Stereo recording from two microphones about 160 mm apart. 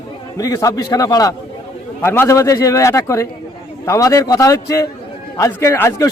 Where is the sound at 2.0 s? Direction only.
15° left (ahead or behind).